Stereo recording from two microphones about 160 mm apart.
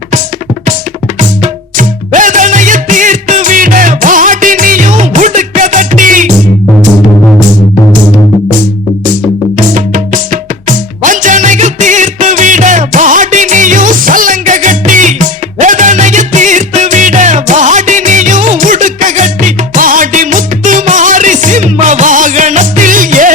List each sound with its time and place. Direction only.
1.2 s music: 55° right (ahead or behind)
9.6 s music: 55° right (ahead or behind)